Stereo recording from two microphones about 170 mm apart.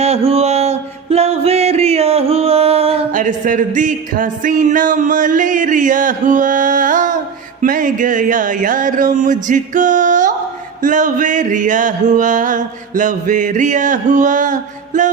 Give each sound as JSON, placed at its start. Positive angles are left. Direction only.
{"t": 0.0, "sound": "music", "side_deg": -35}
{"t": 3.1, "sound": "music", "side_deg": -50}